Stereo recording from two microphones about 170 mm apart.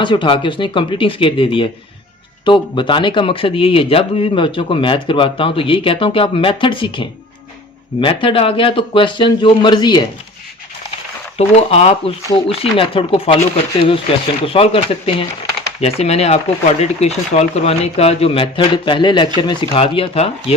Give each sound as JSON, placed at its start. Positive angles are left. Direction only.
{"t": 0.0, "sound": "speech", "side_deg": 30}
{"t": 11.3, "sound": "speech", "side_deg": 40}
{"t": 14.4, "sound": "speech", "side_deg": 35}